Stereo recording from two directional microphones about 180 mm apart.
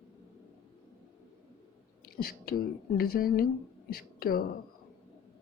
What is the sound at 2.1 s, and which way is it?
Speech, 55° left (ahead or behind).